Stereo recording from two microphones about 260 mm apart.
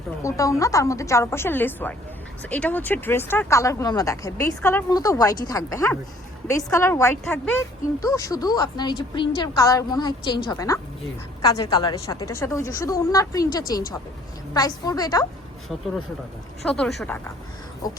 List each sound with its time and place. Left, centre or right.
0.2 s speech: centre
16.6 s speech: centre